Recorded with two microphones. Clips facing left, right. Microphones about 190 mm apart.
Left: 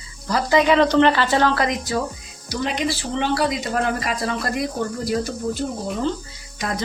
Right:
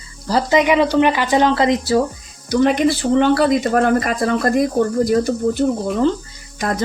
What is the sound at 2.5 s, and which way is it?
Speech, 55° right (ahead or behind).